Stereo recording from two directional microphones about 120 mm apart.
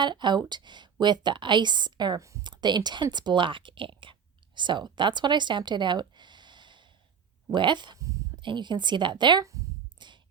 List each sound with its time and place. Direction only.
0.0 s a woman's voice: 40° right (ahead or behind)
7.9 s a sound: 25° right (ahead or behind)
8.4 s a woman's voice: 40° right (ahead or behind)
9.4 s speech: 25° right (ahead or behind)
10.0 s music: 40° right (ahead or behind)